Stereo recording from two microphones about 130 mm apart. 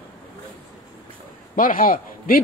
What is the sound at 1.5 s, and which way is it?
Speech, 90° left.